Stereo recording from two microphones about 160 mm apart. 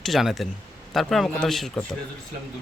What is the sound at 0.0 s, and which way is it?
A man's voice, centre (ahead or behind).